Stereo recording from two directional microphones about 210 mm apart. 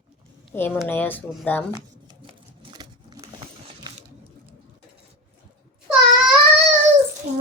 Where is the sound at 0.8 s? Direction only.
10° left (ahead or behind).